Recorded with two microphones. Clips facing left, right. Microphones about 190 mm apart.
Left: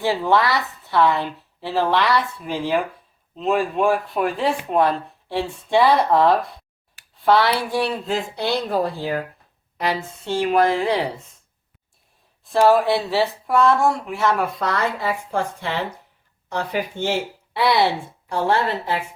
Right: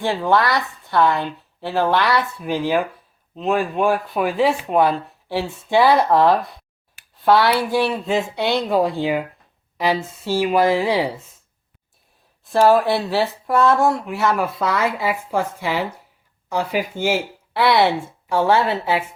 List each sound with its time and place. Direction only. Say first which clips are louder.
0.0 s speech: even; 5° left (ahead or behind)
8.7 s speech: right 4 dB; 90° right
9.7 s speech: right 3 dB; centre (ahead or behind)
12.5 s speech: right 1 dB; centre (ahead or behind)